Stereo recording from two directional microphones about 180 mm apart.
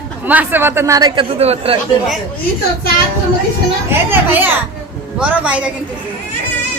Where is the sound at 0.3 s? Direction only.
10° right (ahead or behind); by 1.8 s 35° right (ahead or behind).